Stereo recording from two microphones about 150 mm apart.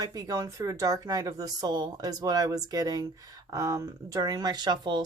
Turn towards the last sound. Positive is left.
turn(degrees=-30)  # may be behind; listen again after turning